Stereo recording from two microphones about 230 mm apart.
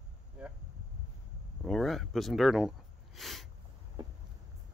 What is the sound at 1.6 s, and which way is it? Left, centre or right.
Speech, centre.